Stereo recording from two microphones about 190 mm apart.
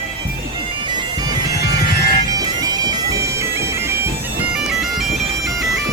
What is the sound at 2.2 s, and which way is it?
Bagpipes, 20° right (ahead or behind).